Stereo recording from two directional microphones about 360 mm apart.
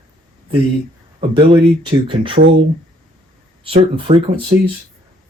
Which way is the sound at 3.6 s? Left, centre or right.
Centre.